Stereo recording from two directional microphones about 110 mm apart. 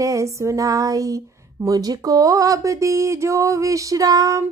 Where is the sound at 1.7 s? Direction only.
35° right (ahead or behind).